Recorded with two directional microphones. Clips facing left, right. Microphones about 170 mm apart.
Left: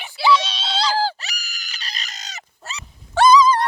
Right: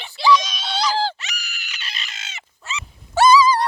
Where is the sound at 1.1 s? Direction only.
35° left (ahead or behind).